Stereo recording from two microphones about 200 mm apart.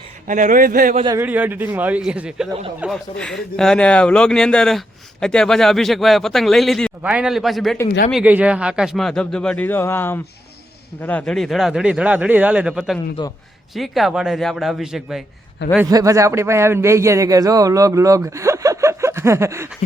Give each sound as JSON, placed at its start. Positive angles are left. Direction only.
{"t": 0.3, "sound": "a man's voice", "side_deg": -40}
{"t": 1.0, "sound": "speech", "side_deg": -10}
{"t": 13.2, "sound": "a man's voice", "side_deg": 20}
{"t": 13.7, "sound": "speech", "side_deg": 0}
{"t": 15.9, "sound": "speech", "side_deg": -15}